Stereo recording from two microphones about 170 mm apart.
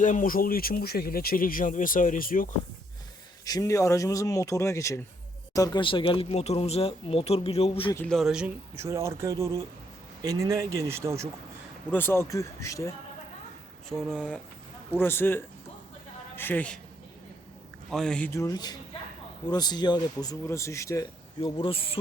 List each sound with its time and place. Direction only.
0.0 s speech: 50° left (ahead or behind)
3.4 s speech: 20° left (ahead or behind)
7.9 s speech: 5° left (ahead or behind); by 11.3 s 15° right (ahead or behind)
11.9 s speech: 10° left (ahead or behind)
13.9 s speech: centre (ahead or behind)
17.9 s speech: 5° left (ahead or behind)
18.3 s speech: 20° left (ahead or behind)
21.4 s speech: 35° left (ahead or behind)